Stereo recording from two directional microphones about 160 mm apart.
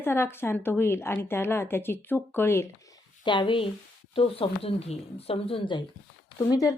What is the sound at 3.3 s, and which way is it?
Speech, 30° left (ahead or behind).